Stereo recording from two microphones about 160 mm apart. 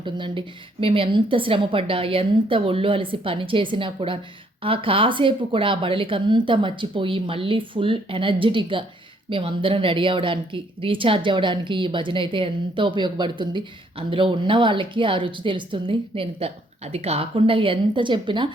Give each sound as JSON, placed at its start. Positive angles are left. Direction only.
{"t": 0.0, "sound": "a woman's voice", "side_deg": -30}